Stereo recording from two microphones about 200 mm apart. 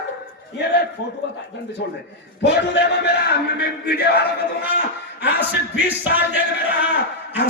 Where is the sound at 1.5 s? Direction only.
60° left (ahead or behind).